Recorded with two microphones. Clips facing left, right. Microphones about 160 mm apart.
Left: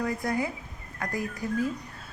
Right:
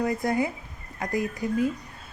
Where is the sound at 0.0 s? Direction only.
25° right (ahead or behind).